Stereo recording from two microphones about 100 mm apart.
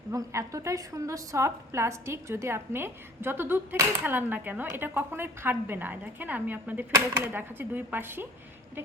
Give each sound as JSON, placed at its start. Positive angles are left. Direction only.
{"t": 0.1, "sound": "a woman's voice", "side_deg": -30}